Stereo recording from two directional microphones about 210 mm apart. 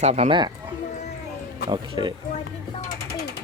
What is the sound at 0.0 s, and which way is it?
Speech, 30° right (ahead or behind).